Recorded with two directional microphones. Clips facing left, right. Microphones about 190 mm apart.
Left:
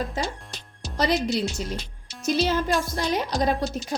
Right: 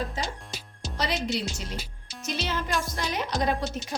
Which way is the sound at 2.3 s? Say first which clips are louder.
Left 7 dB; 35° left (ahead or behind).